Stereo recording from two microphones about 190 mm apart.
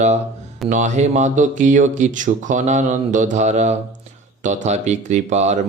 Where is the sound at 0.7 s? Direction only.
40° right (ahead or behind).